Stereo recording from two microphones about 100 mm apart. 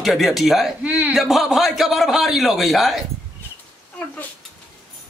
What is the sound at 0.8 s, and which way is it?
Speech, 15° right (ahead or behind).